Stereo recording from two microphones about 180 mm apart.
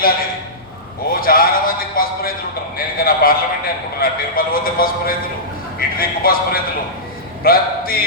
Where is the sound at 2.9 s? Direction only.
55° left (ahead or behind).